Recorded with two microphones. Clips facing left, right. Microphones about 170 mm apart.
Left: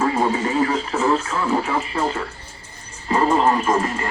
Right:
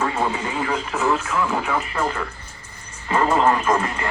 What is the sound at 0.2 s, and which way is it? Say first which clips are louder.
Radio: left 5 dB; 35° left (ahead or behind).